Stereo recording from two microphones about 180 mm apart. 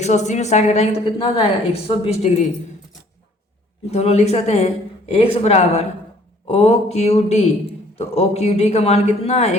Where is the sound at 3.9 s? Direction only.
35° left (ahead or behind).